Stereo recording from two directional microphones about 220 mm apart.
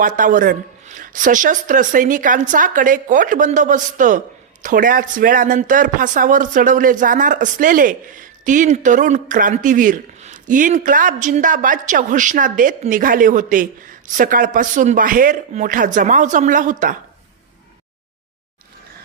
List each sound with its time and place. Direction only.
0.2 s speech: 35° right (ahead or behind)